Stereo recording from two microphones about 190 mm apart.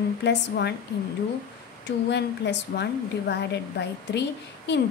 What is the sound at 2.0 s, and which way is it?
A woman's voice, 65° left (ahead or behind).